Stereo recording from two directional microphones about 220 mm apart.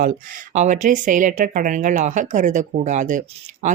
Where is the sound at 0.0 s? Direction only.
35° right (ahead or behind).